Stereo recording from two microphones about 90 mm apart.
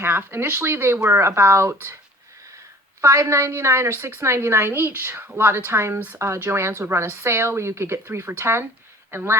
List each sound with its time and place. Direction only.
0.0 s a woman's voice: 25° right (ahead or behind)
3.0 s a woman's voice: 35° right (ahead or behind)